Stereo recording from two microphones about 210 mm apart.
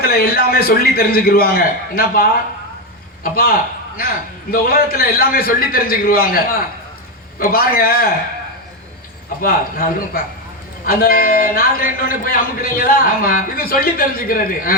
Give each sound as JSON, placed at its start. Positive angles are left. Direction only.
{"t": 0.0, "sound": "a man's voice", "side_deg": 45}
{"t": 9.4, "sound": "a man's voice", "side_deg": 45}